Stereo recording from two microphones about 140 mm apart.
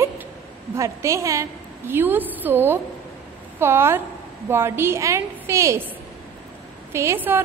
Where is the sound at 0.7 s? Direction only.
20° right (ahead or behind).